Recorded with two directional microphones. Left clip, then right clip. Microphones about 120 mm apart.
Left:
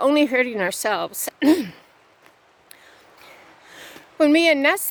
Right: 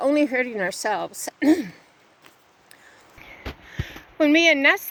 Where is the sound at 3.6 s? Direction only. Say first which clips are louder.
Right 3 dB; 40° left (ahead or behind).